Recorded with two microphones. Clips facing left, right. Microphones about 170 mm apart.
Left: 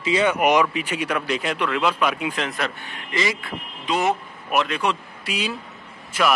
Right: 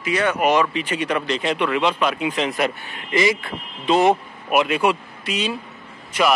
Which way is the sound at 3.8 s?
30° right (ahead or behind).